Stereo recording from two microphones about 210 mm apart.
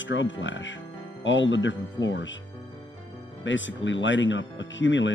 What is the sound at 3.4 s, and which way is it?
Speech, 60° left (ahead or behind).